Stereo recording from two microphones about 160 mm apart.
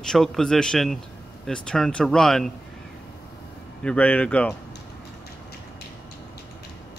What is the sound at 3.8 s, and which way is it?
Speech, 10° left (ahead or behind).